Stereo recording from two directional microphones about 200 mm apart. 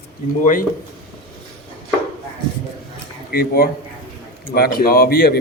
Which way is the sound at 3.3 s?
50° left (ahead or behind).